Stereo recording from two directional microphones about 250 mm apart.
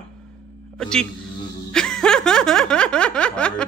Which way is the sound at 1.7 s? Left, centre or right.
Centre.